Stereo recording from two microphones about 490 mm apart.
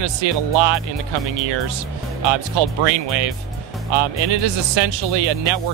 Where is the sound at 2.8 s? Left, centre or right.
Right.